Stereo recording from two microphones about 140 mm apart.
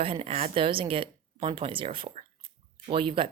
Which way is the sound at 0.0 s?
45° right (ahead or behind).